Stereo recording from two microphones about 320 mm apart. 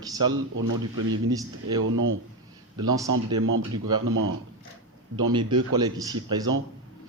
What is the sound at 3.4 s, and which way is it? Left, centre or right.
Speech, right.